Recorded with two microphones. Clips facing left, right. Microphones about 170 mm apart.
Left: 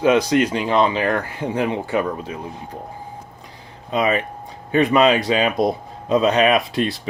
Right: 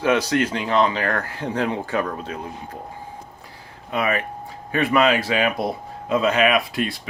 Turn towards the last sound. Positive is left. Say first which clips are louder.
# left 3 dB
turn(degrees=25)  # may be behind; listen again after turning